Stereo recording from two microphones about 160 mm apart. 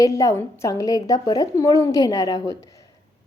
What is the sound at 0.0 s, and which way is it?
Speech, 20° left (ahead or behind).